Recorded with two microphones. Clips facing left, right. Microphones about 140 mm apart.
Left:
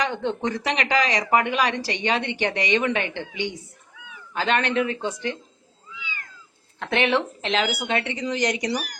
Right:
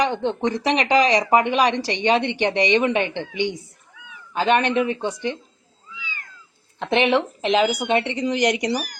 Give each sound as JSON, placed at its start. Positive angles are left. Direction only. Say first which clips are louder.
{"t": 0.0, "sound": "speech", "louder": "right 4 dB", "side_deg": -20}
{"t": 6.7, "sound": "speech", "louder": "right 3 dB", "side_deg": -20}